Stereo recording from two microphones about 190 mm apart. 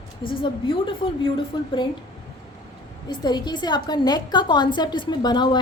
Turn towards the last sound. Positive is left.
turn(degrees=20)  # may be behind; listen again after turning